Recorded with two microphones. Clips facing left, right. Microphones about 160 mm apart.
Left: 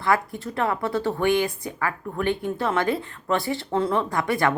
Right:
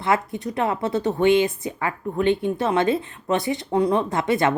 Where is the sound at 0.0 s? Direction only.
20° right (ahead or behind).